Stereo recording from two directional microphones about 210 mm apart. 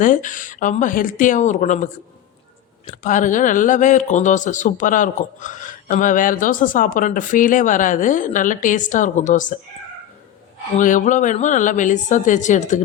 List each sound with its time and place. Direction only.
0.0 s speech: 40° left (ahead or behind)
10.8 s speech: 35° left (ahead or behind)